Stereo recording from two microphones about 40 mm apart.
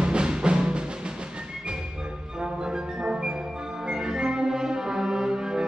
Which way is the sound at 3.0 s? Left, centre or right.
Right.